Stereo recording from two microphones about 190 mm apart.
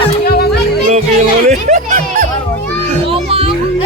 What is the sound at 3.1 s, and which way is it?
Children playing, 30° right (ahead or behind).